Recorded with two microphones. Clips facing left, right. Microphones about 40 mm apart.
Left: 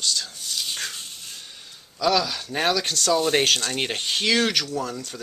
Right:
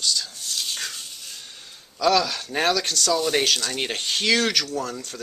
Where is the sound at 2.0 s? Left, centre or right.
Centre.